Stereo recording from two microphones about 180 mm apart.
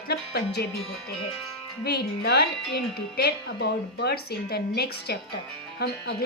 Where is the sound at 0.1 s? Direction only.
65° left (ahead or behind).